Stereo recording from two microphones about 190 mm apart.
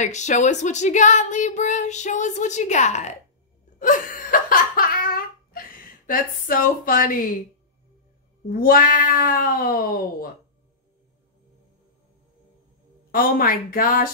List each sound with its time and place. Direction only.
0.0 s speech: 40° left (ahead or behind)
3.8 s laughter: 45° left (ahead or behind)
8.5 s speech: 50° left (ahead or behind)
13.1 s speech: 50° left (ahead or behind)